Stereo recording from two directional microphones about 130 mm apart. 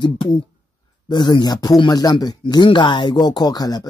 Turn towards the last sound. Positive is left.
turn(degrees=30)  # may be behind; listen again after turning